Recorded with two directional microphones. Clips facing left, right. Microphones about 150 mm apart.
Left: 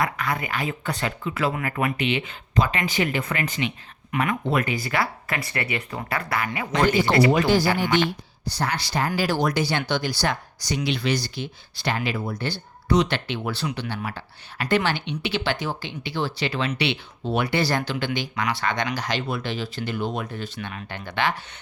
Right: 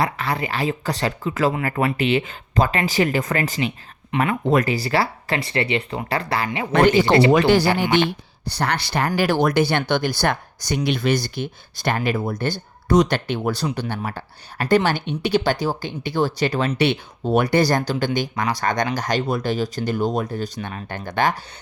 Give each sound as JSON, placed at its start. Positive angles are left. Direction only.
{"t": 0.0, "sound": "speech", "side_deg": -30}
{"t": 7.3, "sound": "speech", "side_deg": -70}